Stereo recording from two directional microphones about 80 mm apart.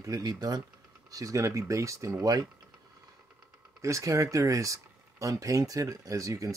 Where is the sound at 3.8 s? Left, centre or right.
Right.